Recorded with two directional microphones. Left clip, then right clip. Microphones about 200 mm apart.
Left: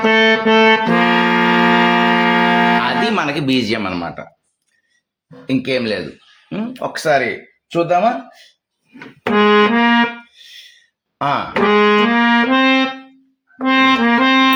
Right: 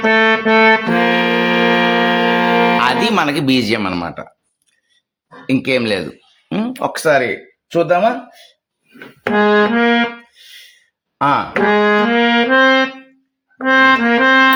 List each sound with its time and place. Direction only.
0.0 s music: 5° left (ahead or behind)
2.8 s speech: 40° right (ahead or behind)
5.5 s speech: 35° right (ahead or behind)
9.3 s music: 5° left (ahead or behind)
11.2 s speech: 35° right (ahead or behind)
11.5 s brass instrument: 10° left (ahead or behind)
13.9 s brass instrument: 10° left (ahead or behind)